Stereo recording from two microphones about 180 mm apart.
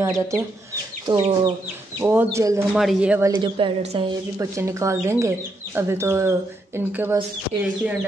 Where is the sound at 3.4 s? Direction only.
30° right (ahead or behind).